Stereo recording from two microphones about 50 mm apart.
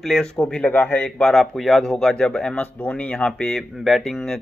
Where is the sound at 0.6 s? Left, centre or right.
Left.